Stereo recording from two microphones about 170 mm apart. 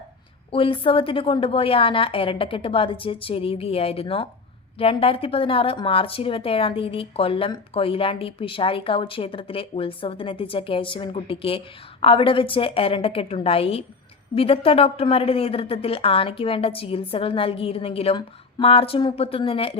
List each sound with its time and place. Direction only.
0.5 s speech: 30° left (ahead or behind)